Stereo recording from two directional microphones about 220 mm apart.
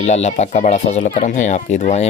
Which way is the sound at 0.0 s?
30° left (ahead or behind).